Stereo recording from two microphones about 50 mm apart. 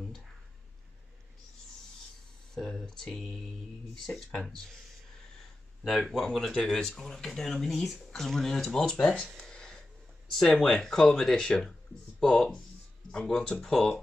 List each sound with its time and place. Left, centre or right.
2.5 s speech: centre
6.0 s speech: centre
6.5 s speech: centre
9.0 s speech: centre
9.5 s a sound: centre
10.3 s speech: centre